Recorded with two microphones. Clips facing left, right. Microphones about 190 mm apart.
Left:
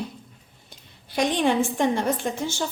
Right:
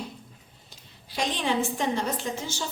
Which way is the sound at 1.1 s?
55° left (ahead or behind).